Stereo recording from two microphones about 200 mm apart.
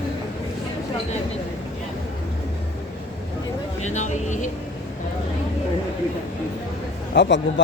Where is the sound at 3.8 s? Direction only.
35° left (ahead or behind).